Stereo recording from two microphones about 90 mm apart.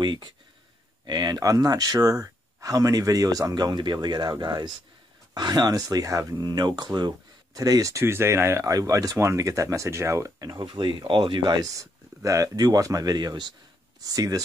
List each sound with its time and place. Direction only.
0.0 s speech: 55° right (ahead or behind); by 10.6 s 40° right (ahead or behind)
10.6 s speech: 60° right (ahead or behind)
14.0 s speech: 40° right (ahead or behind)